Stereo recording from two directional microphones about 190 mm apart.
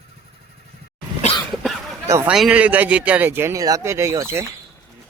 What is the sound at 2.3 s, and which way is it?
A man's voice, 5° right (ahead or behind).